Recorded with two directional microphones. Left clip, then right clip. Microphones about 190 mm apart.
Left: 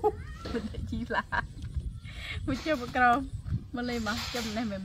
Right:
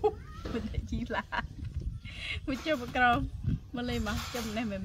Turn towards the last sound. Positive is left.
turn(degrees=-40)  # may be behind; listen again after turning